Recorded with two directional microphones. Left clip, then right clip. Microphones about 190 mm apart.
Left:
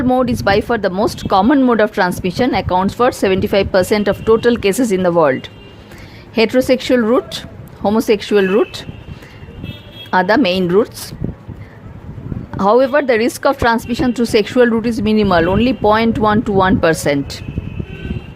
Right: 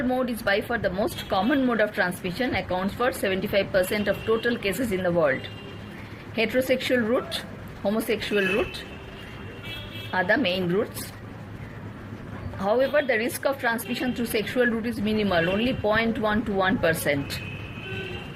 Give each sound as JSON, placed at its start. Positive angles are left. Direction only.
{"t": 0.1, "sound": "speech", "side_deg": 50}
{"t": 10.1, "sound": "a woman's voice", "side_deg": 55}
{"t": 12.5, "sound": "speech", "side_deg": 60}